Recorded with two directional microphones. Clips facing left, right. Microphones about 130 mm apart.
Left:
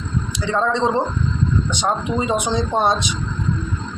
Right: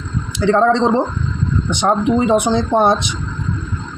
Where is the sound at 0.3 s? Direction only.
60° right (ahead or behind).